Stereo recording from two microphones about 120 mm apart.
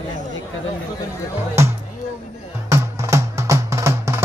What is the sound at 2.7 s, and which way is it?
Music, 25° right (ahead or behind).